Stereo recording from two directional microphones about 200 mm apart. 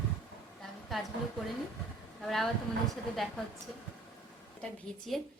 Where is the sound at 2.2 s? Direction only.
Centre (ahead or behind).